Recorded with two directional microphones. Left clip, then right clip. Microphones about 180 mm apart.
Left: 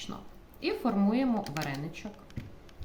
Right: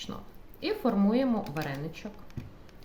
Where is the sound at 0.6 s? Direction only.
15° right (ahead or behind).